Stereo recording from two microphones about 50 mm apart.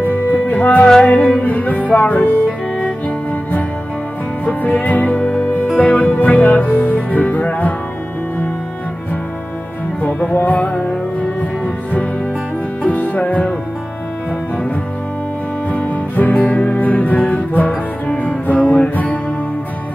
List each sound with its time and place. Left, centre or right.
0.0 s music: left
4.5 s music: left
10.3 s music: left
15.7 s music: left